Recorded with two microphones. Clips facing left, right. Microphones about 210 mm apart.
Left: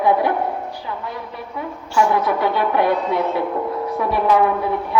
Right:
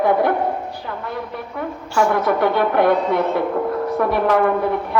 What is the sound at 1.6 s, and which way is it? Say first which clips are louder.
A woman's voice: even; 55° right (ahead or behind).